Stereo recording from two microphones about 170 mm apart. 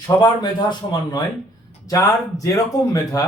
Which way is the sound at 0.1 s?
15° left (ahead or behind).